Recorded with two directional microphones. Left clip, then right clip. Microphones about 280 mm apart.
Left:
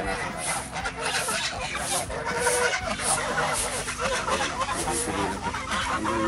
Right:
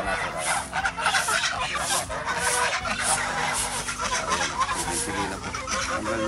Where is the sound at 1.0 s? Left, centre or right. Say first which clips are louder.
Right 4 dB; centre.